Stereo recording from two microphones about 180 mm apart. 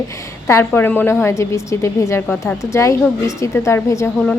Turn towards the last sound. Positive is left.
turn(degrees=15)  # may be behind; listen again after turning